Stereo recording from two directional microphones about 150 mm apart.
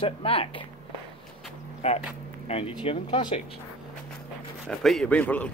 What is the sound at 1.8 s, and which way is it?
Speech, 40° left (ahead or behind).